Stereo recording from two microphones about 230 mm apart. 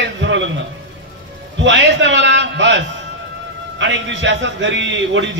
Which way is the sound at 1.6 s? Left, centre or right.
Right.